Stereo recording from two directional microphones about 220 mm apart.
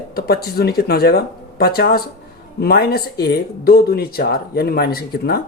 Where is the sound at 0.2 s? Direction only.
45° left (ahead or behind).